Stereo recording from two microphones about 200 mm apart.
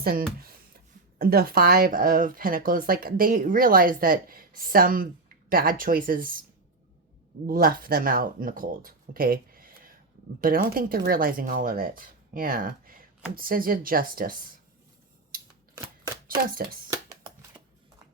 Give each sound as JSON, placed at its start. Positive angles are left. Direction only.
{"t": 0.0, "sound": "speech", "side_deg": -50}
{"t": 0.3, "sound": "a sound", "side_deg": -50}
{"t": 1.2, "sound": "speech", "side_deg": -50}
{"t": 7.4, "sound": "speech", "side_deg": -45}